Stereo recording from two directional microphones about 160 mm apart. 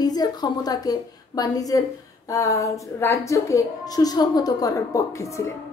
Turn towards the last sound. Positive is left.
turn(degrees=20)  # may be behind; listen again after turning